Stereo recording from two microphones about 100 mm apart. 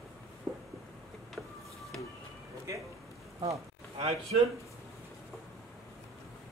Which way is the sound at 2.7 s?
30° right (ahead or behind).